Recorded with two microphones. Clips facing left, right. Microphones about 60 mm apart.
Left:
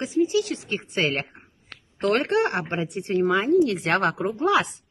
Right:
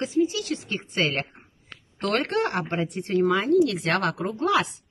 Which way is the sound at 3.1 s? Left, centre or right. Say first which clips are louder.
Left 1 dB; left.